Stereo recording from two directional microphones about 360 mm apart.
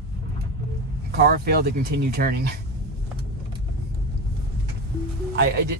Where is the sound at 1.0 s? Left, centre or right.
Right.